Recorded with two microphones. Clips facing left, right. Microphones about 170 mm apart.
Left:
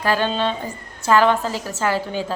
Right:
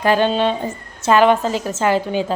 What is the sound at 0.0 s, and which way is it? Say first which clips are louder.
A woman's voice: right 5 dB; 20° right (ahead or behind).